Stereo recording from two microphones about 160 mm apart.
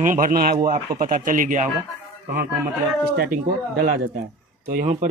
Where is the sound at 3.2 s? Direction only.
70° right (ahead or behind).